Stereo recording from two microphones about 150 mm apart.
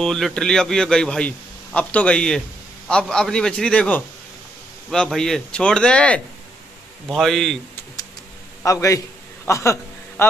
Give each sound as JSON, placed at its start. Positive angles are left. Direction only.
{"t": 0.0, "sound": "a man's voice", "side_deg": 5}
{"t": 8.6, "sound": "a man's voice", "side_deg": 20}
{"t": 9.5, "sound": "a sound", "side_deg": 15}